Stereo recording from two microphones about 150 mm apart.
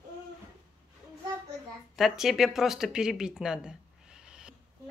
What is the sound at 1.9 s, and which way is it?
Speech, 5° right (ahead or behind).